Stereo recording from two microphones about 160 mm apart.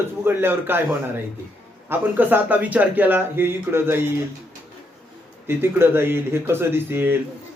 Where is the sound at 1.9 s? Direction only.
10° right (ahead or behind).